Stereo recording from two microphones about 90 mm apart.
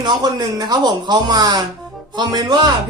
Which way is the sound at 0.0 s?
55° right (ahead or behind).